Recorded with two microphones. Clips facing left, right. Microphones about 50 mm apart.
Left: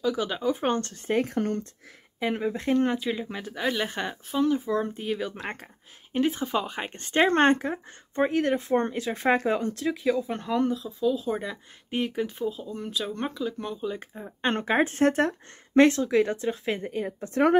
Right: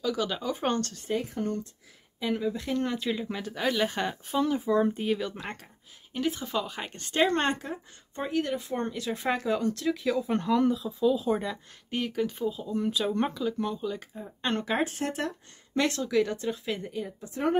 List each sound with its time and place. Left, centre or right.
0.0 s speech: centre
1.0 s speech: left
2.1 s speech: left
3.0 s speech: centre
5.4 s speech: left
10.1 s speech: centre
12.0 s speech: centre
12.4 s speech: centre
13.8 s speech: left
16.1 s speech: left